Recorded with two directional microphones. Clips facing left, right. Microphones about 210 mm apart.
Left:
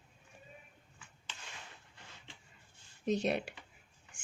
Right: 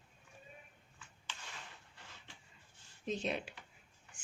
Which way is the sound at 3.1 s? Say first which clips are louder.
Left 6 dB; 70° left (ahead or behind).